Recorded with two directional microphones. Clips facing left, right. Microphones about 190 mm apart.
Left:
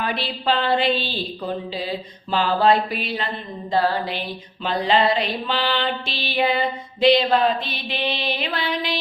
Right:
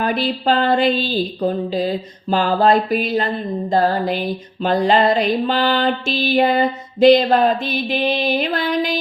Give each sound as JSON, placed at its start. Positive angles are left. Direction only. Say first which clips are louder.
{"t": 0.0, "sound": "speech", "louder": "right 6 dB", "side_deg": -45}